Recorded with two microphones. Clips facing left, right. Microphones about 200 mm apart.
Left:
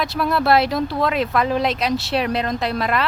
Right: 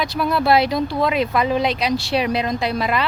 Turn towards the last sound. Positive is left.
turn(degrees=0)  # may be behind; listen again after turning